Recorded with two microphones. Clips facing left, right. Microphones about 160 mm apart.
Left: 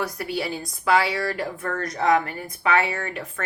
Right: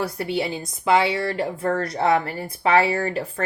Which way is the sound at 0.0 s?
25° right (ahead or behind).